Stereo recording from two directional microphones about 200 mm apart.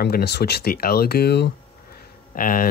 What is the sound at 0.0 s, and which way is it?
Speech, 55° left (ahead or behind).